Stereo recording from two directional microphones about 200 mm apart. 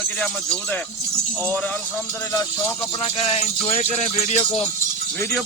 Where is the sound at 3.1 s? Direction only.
30° left (ahead or behind).